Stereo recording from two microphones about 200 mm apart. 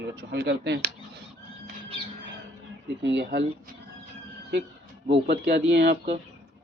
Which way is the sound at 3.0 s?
60° right (ahead or behind).